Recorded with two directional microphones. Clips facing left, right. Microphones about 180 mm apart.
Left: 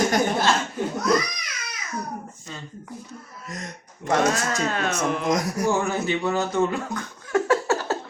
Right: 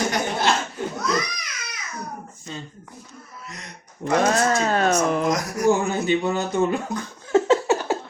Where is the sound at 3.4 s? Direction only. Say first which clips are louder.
Left 7 dB; 45° left (ahead or behind).